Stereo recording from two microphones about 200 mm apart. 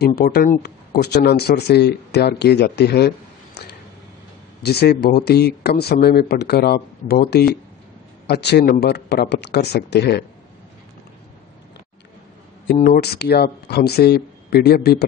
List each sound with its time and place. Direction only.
0.0 s speech: 50° left (ahead or behind)
4.6 s speech: 55° left (ahead or behind)
12.7 s speech: 45° left (ahead or behind)